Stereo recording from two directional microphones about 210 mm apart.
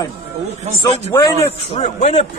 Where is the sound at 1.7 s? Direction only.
30° left (ahead or behind).